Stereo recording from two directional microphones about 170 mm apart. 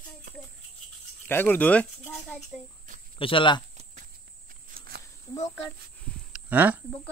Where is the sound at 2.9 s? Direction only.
50° right (ahead or behind).